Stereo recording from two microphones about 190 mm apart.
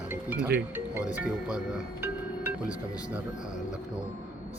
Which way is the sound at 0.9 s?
5° right (ahead or behind).